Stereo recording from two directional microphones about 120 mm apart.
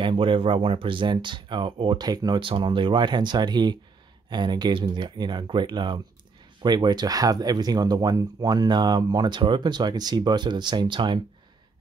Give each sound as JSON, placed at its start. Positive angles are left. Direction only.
{"t": 0.0, "sound": "speech", "side_deg": -45}